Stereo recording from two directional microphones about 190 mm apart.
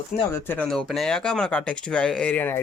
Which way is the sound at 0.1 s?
45° left (ahead or behind).